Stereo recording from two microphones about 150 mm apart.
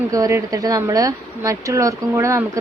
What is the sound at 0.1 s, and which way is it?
Speech, 20° right (ahead or behind).